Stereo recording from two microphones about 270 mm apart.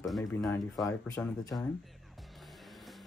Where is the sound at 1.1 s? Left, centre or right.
Centre.